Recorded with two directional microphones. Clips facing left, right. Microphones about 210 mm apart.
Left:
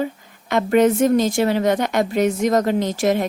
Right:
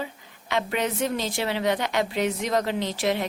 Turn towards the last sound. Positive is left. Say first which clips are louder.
# left 7 dB
turn(degrees=45)  # may be behind; listen again after turning